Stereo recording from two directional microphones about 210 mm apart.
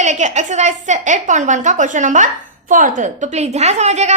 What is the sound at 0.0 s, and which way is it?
A woman's voice, 35° right (ahead or behind).